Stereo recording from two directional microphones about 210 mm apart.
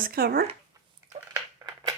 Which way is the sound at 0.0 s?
45° right (ahead or behind).